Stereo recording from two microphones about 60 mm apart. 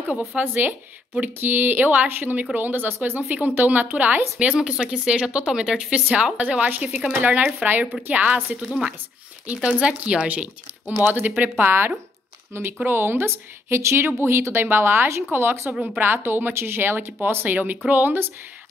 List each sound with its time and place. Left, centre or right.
0.4 s speech: right
4.6 s speech: centre
6.3 s speech: right
8.5 s speech: centre
9.5 s speech: centre
11.0 s speech: right